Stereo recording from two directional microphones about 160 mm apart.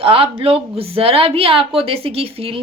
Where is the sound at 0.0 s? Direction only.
35° right (ahead or behind).